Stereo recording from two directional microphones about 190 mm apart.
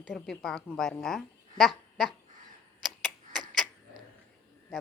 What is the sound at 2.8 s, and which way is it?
Tick-tock, centre (ahead or behind).